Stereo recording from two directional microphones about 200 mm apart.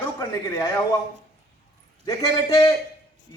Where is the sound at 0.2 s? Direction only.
15° left (ahead or behind).